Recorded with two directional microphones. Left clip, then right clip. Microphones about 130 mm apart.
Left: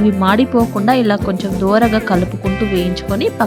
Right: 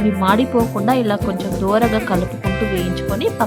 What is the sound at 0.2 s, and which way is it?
Speech, 25° left (ahead or behind).